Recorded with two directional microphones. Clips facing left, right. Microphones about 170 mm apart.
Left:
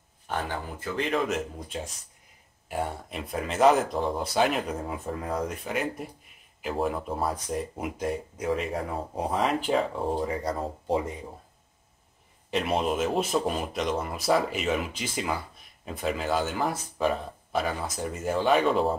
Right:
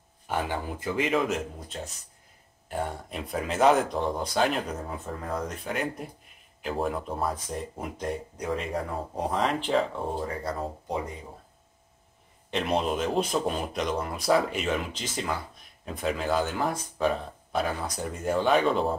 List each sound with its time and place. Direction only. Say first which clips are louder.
0.3 s speech: right 2 dB; 10° right (ahead or behind)
1.0 s speech: right 1 dB; centre (ahead or behind)
2.7 s speech: left 1 dB; centre (ahead or behind)
10.2 s speech: left 2 dB; 20° left (ahead or behind)
12.4 s speech: left 1 dB; 5° left (ahead or behind)